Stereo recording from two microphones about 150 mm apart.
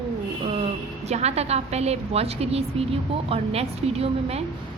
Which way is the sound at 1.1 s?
45° right (ahead or behind).